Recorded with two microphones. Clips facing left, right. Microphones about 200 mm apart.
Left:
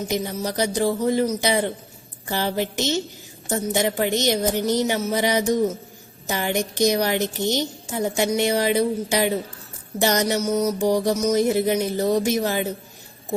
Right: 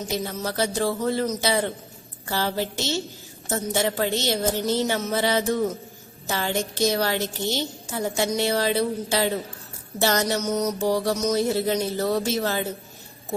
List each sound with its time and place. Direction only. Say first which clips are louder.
0.0 s a woman's voice: left 3 dB; 15° left (ahead or behind)